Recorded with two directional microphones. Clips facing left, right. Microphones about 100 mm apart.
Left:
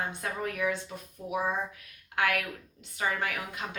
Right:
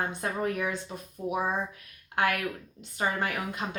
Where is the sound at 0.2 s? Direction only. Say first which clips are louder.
Right 2 dB; 35° right (ahead or behind).